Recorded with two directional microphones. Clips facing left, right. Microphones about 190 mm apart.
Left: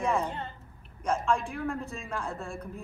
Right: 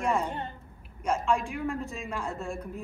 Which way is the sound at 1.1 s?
Centre (ahead or behind).